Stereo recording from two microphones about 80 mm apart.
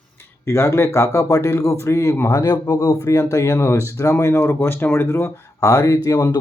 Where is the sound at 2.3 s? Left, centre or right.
Left.